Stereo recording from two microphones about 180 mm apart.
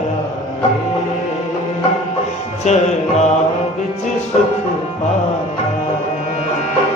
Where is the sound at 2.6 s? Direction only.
40° left (ahead or behind).